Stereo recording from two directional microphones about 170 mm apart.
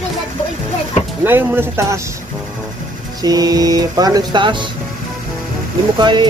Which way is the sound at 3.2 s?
20° right (ahead or behind).